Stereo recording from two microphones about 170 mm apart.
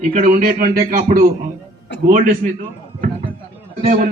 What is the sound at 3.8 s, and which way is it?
Speech, 45° right (ahead or behind).